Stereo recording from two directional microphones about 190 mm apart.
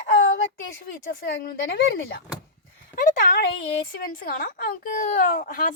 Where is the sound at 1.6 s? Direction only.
85° left.